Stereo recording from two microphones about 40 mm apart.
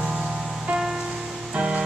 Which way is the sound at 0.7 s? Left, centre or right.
Centre.